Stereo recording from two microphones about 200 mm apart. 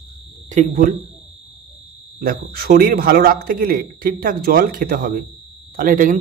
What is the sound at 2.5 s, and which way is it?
Speech, 50° right (ahead or behind).